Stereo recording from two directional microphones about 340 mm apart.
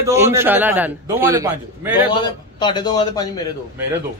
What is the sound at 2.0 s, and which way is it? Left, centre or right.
A man's voice, centre.